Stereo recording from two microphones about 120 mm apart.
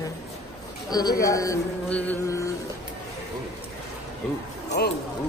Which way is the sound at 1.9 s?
10° left (ahead or behind).